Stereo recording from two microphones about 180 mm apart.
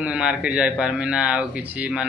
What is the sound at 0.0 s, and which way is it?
Speech, 5° right (ahead or behind).